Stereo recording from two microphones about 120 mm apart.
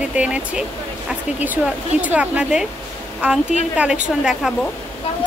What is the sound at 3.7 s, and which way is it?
Speech, 10° right (ahead or behind).